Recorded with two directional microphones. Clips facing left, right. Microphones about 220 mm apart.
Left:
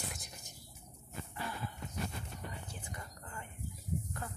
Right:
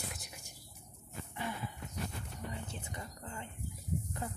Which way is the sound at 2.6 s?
25° right (ahead or behind).